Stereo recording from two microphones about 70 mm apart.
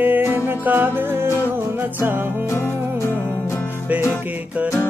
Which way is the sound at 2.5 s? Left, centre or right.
Left.